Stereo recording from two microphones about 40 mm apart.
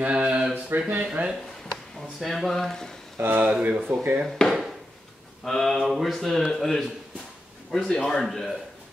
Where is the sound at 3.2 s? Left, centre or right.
Right.